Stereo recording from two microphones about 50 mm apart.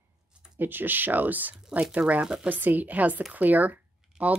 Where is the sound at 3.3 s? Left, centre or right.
Right.